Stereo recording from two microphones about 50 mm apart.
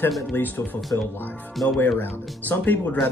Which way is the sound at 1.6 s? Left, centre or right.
Left.